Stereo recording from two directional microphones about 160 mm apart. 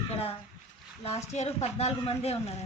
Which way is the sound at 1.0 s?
40° left (ahead or behind).